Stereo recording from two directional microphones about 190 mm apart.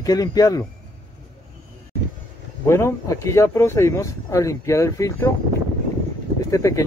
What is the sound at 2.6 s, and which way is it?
Speech, 15° left (ahead or behind).